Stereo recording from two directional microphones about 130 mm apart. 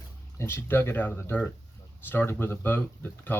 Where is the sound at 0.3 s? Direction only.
20° left (ahead or behind).